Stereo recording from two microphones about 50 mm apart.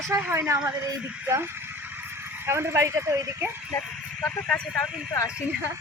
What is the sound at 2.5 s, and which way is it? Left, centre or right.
Speech, right.